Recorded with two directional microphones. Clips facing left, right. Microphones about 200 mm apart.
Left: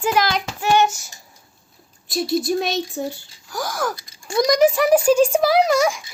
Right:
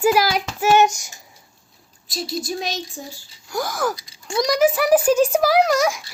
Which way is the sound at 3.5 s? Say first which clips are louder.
Right 2 dB; 10° right (ahead or behind).